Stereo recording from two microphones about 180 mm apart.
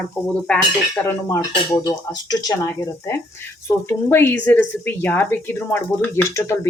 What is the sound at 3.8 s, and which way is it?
Speech, 10° left (ahead or behind).